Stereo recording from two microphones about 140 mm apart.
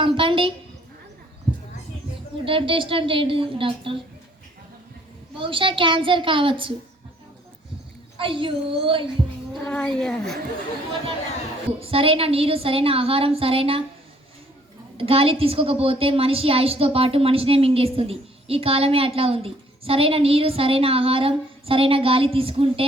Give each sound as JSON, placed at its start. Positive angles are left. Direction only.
{"t": 0.0, "sound": "a sound", "side_deg": -40}
{"t": 2.4, "sound": "a woman's voice", "side_deg": -40}
{"t": 5.4, "sound": "a woman's voice", "side_deg": -40}
{"t": 8.2, "sound": "a woman's voice", "side_deg": -40}
{"t": 9.6, "sound": "speech", "side_deg": 5}
{"t": 11.8, "sound": "a woman's voice", "side_deg": -45}
{"t": 14.9, "sound": "a woman's voice", "side_deg": -45}